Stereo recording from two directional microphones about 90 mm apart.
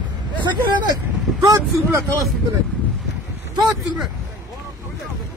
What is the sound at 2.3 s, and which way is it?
Speech, centre (ahead or behind).